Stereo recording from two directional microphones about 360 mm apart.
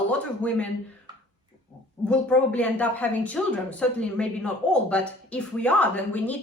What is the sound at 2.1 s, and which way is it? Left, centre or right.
A woman's voice, centre.